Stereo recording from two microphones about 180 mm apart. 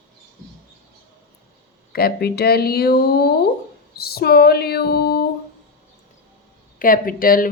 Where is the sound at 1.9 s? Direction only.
60° left (ahead or behind).